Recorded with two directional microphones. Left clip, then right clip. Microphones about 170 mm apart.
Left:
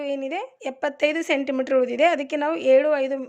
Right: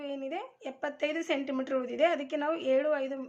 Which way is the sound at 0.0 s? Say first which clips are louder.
Left 9 dB; 50° left (ahead or behind).